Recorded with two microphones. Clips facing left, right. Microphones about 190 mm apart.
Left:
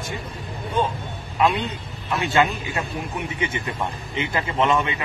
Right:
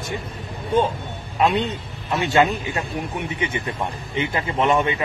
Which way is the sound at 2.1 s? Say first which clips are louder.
Right 2 dB; 25° right (ahead or behind).